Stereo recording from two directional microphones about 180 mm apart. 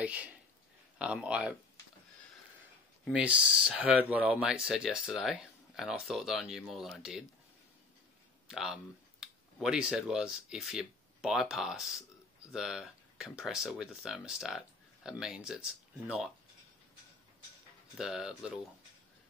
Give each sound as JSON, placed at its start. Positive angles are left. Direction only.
{"t": 0.0, "sound": "speech", "side_deg": -5}
{"t": 3.1, "sound": "speech", "side_deg": -5}
{"t": 8.5, "sound": "speech", "side_deg": 0}
{"t": 17.9, "sound": "speech", "side_deg": 0}